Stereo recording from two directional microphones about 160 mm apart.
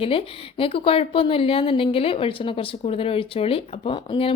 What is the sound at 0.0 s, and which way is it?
A woman's voice, 35° left (ahead or behind).